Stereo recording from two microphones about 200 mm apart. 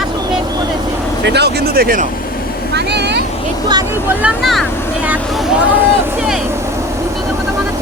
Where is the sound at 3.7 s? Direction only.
15° right (ahead or behind).